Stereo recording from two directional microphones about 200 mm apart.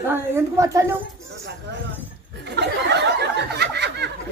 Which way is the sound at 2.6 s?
60° right (ahead or behind).